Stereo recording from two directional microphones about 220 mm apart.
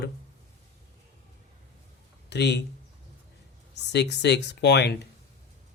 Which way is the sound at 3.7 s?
50° left (ahead or behind).